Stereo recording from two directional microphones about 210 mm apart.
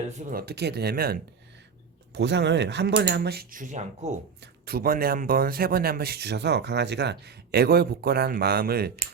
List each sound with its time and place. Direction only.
0.3 s speech: 45° right (ahead or behind)
4.4 s speech: 45° right (ahead or behind)